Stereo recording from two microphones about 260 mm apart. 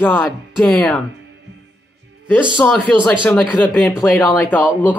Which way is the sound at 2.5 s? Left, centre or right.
Centre.